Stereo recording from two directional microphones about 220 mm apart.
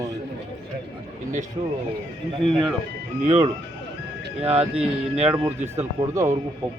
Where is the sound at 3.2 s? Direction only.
30° right (ahead or behind).